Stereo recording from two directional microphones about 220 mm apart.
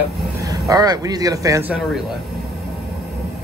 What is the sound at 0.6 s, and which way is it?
Speech, 15° right (ahead or behind).